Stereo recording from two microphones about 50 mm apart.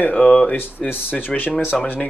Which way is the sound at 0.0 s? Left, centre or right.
Left.